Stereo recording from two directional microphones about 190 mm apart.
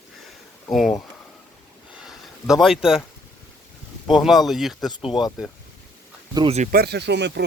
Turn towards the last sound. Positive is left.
turn(degrees=-65)  # may be behind; listen again after turning